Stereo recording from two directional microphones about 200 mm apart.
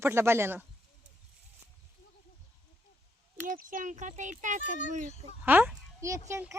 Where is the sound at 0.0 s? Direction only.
10° right (ahead or behind).